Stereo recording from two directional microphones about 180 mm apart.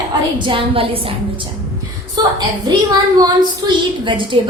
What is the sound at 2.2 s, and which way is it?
A woman's voice, 25° right (ahead or behind).